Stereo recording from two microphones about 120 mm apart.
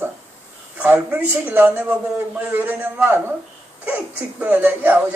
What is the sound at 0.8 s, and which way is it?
A man's voice, 10° right (ahead or behind).